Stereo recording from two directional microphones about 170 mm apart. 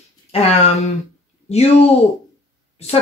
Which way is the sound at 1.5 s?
40° left (ahead or behind).